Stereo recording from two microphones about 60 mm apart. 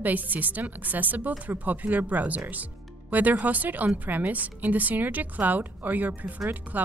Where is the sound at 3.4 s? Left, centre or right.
Right.